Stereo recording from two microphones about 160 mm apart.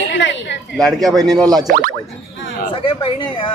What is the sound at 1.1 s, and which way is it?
Speech, 25° right (ahead or behind).